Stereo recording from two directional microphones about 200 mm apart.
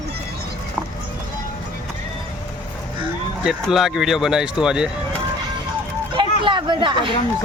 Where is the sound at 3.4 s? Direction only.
5° right (ahead or behind).